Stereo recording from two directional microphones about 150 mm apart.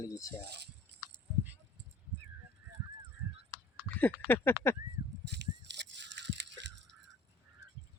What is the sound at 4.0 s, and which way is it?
Speech, 15° left (ahead or behind).